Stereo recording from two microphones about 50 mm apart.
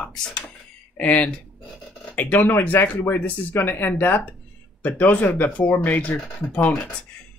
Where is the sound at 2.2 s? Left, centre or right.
Left.